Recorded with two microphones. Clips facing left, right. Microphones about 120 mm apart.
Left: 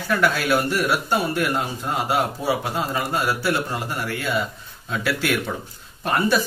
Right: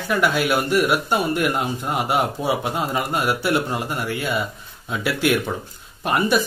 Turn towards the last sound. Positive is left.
turn(degrees=-15)  # may be behind; listen again after turning